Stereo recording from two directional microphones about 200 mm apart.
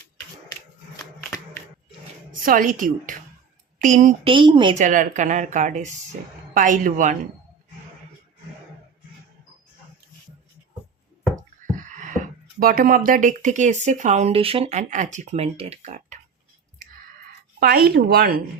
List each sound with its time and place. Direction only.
2.4 s speech: 45° right (ahead or behind)
4.3 s speech: 25° right (ahead or behind)
4.8 s speech: 40° right (ahead or behind)
11.8 s a sound: 40° right (ahead or behind)
12.5 s speech: 45° right (ahead or behind)
17.6 s speech: 50° right (ahead or behind)